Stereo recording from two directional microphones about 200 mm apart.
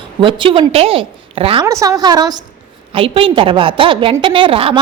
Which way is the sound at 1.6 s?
15° right (ahead or behind).